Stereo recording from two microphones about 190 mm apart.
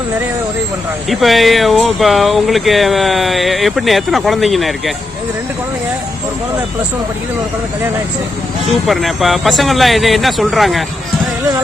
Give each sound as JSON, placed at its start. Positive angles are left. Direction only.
{"t": 1.1, "sound": "speech", "side_deg": 0}
{"t": 8.6, "sound": "speech", "side_deg": 0}